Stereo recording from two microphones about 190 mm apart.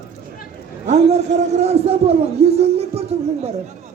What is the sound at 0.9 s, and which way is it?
A man's voice, 35° right (ahead or behind).